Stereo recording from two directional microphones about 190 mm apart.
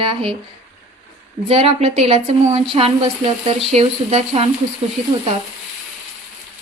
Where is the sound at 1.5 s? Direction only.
30° right (ahead or behind).